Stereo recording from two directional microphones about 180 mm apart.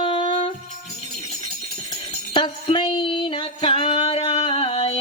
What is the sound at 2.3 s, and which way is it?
Music, 30° left (ahead or behind).